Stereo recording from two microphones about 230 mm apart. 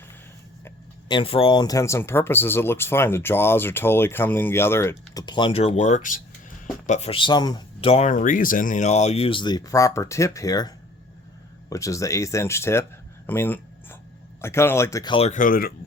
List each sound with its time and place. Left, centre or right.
0.6 s speech: centre; by 15.7 s left